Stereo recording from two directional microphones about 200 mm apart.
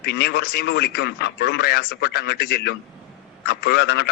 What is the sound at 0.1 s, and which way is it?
A man's voice, 55° left (ahead or behind).